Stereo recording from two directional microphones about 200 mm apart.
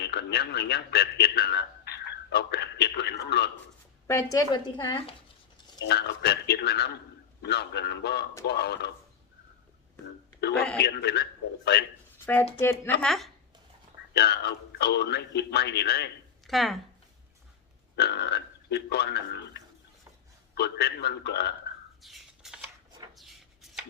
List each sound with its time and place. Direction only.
0.0 s a man's voice: 55° left (ahead or behind)
4.0 s a woman's voice: 15° left (ahead or behind)
5.8 s a man's voice: 55° left (ahead or behind)
10.4 s a man's voice: 55° left (ahead or behind)
12.2 s speech: 10° left (ahead or behind)
14.1 s a man's voice: 55° left (ahead or behind)
16.5 s speech: centre (ahead or behind)
17.9 s a man's voice: 55° left (ahead or behind)
22.0 s a sound: centre (ahead or behind)